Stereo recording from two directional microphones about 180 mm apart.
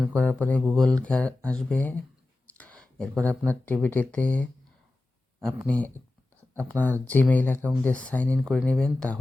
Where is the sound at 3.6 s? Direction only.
10° left (ahead or behind).